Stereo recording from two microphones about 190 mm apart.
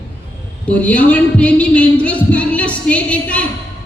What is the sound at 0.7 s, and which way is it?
A woman's voice, 5° left (ahead or behind).